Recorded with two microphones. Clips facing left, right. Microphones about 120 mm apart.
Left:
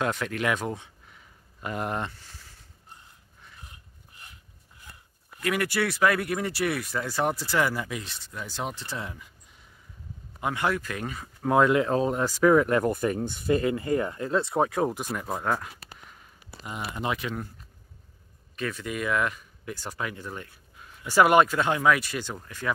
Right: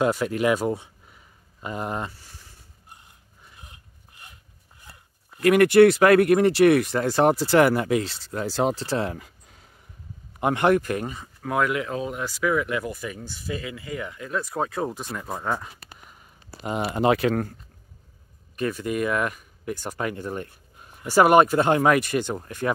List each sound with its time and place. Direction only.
0.0 s speech: 10° right (ahead or behind)
5.4 s speech: 60° right (ahead or behind); by 9.3 s 75° right (ahead or behind)
10.4 s speech: 55° right (ahead or behind)
11.4 s speech: 25° left (ahead or behind)
15.4 s a sound: centre (ahead or behind)
16.6 s speech: 65° right (ahead or behind); by 17.6 s 85° right
18.6 s speech: 45° right (ahead or behind)